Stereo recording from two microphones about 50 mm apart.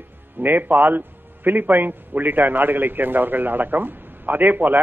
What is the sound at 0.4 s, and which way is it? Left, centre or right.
A man's voice, right.